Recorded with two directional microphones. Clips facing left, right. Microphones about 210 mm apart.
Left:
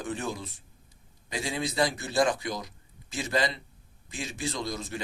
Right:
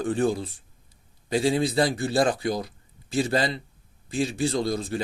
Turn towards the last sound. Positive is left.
turn(degrees=-30)  # may be behind; listen again after turning